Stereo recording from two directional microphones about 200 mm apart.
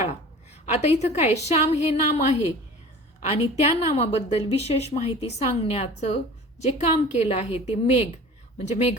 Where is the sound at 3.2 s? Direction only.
30° left (ahead or behind).